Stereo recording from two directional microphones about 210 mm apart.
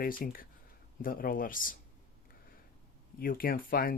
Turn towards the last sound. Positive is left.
turn(degrees=45)  # may be behind; listen again after turning